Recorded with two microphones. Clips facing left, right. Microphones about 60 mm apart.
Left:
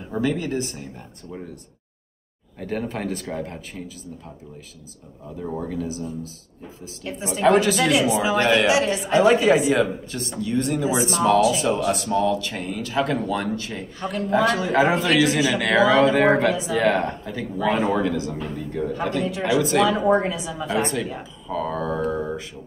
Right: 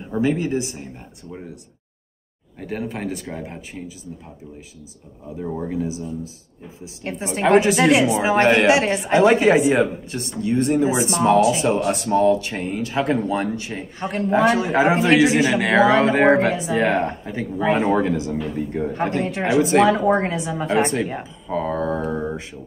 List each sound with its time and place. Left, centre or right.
0.2 s speech: right
2.6 s speech: centre
5.4 s speech: centre
7.0 s speech: right
7.6 s speech: right